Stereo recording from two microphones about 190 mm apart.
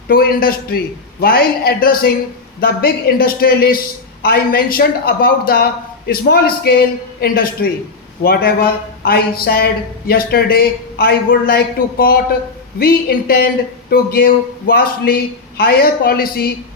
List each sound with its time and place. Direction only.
0.1 s a man's voice: 50° left (ahead or behind)